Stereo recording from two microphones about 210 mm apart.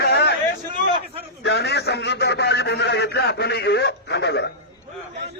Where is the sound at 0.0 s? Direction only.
50° left (ahead or behind).